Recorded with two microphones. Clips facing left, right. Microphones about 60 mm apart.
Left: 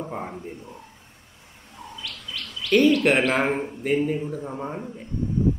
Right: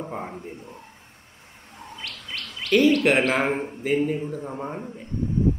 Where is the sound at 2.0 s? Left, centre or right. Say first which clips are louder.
Right 1 dB; right.